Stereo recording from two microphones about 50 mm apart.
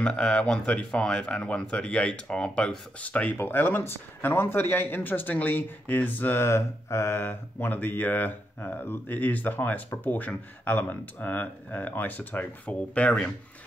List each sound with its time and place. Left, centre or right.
0.0 s speech: centre
3.1 s speech: left
3.3 s speech: left
6.4 s mantra: left
7.2 s speech: left
12.6 s speech: left